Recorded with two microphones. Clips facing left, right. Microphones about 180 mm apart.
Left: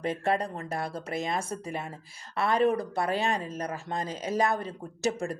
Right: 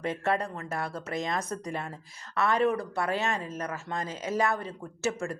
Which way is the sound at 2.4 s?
35° left (ahead or behind).